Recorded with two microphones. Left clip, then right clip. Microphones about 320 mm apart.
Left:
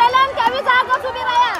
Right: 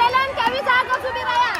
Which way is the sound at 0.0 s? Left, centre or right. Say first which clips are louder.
Left 4 dB; left.